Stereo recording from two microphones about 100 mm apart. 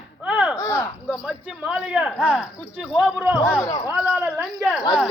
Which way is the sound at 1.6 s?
10° right (ahead or behind).